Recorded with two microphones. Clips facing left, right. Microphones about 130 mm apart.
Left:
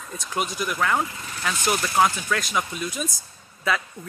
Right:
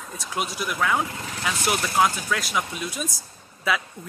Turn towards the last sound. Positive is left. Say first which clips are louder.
# even
turn(degrees=-5)  # may be behind; listen again after turning